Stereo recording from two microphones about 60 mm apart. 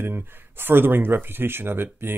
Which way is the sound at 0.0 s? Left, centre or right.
Right.